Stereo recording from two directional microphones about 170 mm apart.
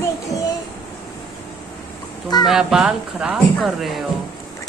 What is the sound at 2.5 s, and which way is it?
Speech, 5° right (ahead or behind).